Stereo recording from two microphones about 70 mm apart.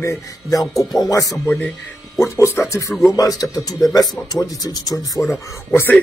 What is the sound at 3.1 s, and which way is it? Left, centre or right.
Speech, left.